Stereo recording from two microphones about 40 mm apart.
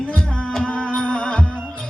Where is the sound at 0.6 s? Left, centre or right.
Left.